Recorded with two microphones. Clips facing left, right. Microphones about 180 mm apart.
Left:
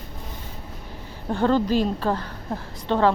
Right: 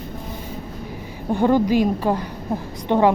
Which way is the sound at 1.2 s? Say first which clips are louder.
Right 3 dB; 15° right (ahead or behind).